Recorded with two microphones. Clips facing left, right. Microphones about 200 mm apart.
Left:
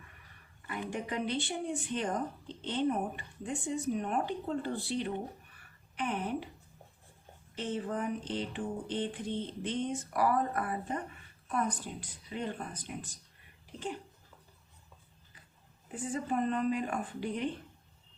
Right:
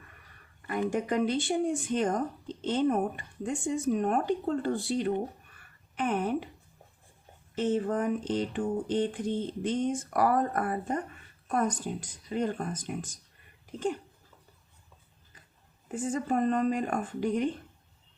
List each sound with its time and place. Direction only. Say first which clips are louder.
0.7 s speech: right 8 dB; 45° right (ahead or behind)
7.5 s speech: right 7 dB; 45° right (ahead or behind)
15.9 s speech: right 5 dB; 45° right (ahead or behind)